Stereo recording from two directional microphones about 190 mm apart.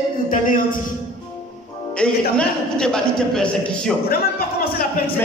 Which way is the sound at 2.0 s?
5° left (ahead or behind).